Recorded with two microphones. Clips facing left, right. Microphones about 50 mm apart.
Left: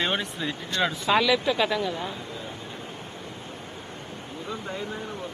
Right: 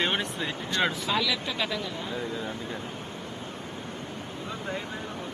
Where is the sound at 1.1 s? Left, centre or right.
Left.